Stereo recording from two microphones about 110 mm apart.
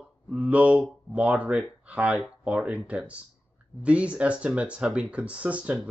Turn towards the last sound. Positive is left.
turn(degrees=-10)  # may be behind; listen again after turning